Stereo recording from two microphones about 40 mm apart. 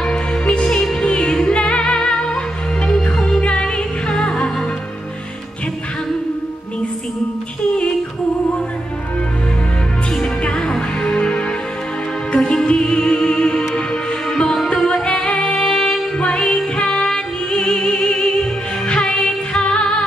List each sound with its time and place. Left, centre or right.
0.0 s music: left
10.4 s music: left
15.0 s music: centre